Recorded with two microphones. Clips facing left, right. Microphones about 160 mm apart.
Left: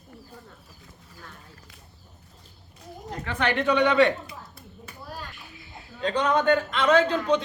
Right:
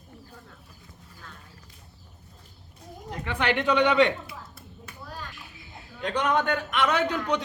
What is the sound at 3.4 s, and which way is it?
Speech, 15° right (ahead or behind).